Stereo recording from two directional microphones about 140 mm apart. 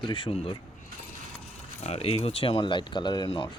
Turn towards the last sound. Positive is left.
turn(degrees=35)  # may be behind; listen again after turning